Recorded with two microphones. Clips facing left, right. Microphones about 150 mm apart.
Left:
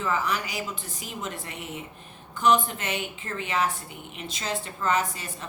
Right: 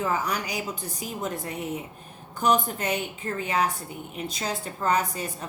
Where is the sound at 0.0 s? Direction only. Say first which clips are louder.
Even; 40° right (ahead or behind).